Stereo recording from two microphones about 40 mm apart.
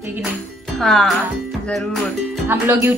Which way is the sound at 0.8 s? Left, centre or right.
Centre.